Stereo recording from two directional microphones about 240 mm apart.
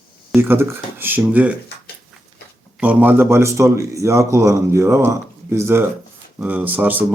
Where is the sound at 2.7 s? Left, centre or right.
Centre.